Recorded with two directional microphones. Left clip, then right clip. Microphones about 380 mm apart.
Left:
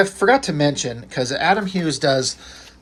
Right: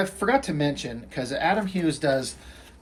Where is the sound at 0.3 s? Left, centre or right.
Centre.